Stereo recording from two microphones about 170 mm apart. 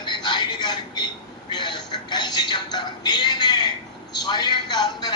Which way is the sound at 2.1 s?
25° left (ahead or behind).